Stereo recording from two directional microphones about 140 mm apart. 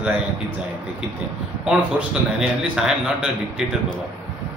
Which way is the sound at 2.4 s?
5° right (ahead or behind).